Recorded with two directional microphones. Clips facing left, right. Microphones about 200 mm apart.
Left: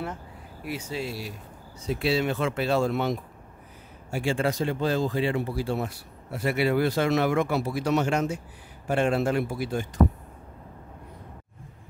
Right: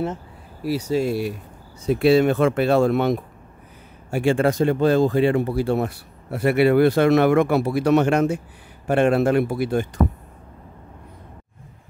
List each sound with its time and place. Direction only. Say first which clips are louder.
0.7 s speech: right 11 dB; 40° right (ahead or behind); by 9.8 s 60° right (ahead or behind)